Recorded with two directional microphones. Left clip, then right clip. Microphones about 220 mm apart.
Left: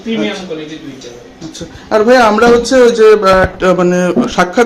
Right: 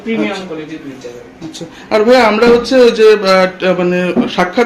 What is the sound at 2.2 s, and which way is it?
Speech, 5° left (ahead or behind).